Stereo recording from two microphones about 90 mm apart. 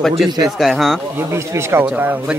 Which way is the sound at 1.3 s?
30° right (ahead or behind).